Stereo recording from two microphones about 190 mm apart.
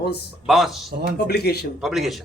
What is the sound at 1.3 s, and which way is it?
Speech, 60° left (ahead or behind).